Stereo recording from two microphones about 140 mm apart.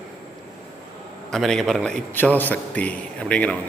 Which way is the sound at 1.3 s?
Centre (ahead or behind).